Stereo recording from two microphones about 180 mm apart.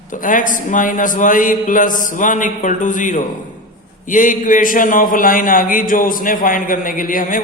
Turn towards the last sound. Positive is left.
turn(degrees=50)  # may be behind; listen again after turning